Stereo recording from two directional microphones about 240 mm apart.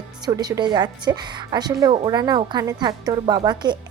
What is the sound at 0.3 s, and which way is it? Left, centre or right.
A woman's voice, centre.